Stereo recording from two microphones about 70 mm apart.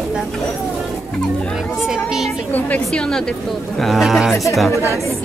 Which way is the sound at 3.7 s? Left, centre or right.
Centre.